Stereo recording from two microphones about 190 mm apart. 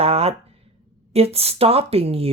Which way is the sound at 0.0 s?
30° right (ahead or behind).